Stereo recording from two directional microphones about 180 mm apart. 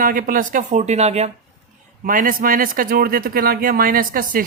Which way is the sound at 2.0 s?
50° right (ahead or behind).